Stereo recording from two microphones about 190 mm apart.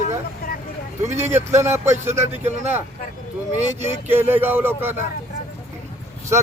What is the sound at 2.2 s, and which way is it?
Speech, 35° right (ahead or behind).